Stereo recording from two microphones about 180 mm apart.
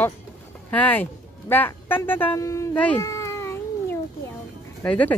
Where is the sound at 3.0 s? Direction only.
15° left (ahead or behind).